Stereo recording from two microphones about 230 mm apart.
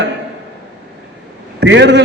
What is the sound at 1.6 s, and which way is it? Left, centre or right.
Speech, right.